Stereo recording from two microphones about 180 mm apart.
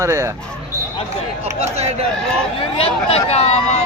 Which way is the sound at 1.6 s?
35° right (ahead or behind).